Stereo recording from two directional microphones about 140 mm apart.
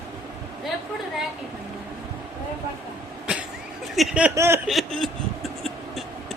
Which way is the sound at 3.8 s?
Centre (ahead or behind).